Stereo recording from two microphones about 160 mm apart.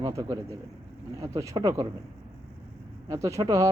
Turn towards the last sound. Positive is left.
turn(degrees=-20)  # may be behind; listen again after turning